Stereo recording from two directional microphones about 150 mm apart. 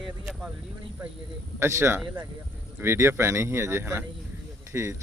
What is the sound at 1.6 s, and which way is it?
Speech, 20° right (ahead or behind).